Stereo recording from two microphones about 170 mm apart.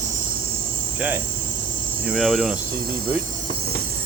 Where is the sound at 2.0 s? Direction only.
Centre (ahead or behind).